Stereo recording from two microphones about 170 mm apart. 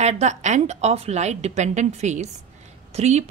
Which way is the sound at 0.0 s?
40° right (ahead or behind).